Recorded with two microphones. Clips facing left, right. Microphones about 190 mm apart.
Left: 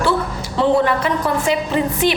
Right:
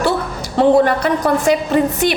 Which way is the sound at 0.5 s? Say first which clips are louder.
Right 4 dB; 45° right (ahead or behind).